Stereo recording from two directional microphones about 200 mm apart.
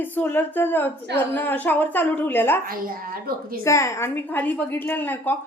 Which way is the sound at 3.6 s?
15° left (ahead or behind).